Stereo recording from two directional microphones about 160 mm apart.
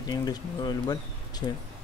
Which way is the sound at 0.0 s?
25° left (ahead or behind).